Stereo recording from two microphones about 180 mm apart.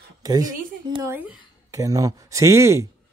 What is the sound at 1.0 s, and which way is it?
A woman's voice, 15° right (ahead or behind).